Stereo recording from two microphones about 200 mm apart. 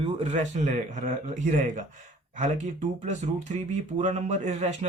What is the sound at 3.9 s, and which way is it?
Speech, 35° right (ahead or behind).